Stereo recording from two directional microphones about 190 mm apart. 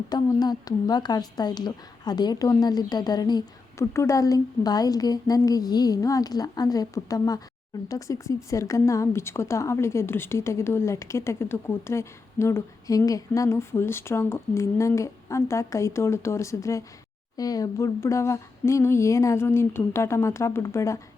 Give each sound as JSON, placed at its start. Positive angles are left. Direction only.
{"t": 0.1, "sound": "a woman's voice", "side_deg": 20}